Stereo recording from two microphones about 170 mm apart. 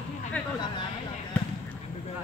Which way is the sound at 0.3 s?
10° left (ahead or behind).